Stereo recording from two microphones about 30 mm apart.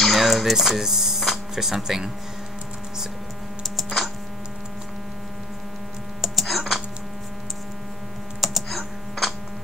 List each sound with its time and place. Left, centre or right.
0.2 s speech: centre
3.6 s typing: centre
6.2 s typing: centre
8.4 s typing: centre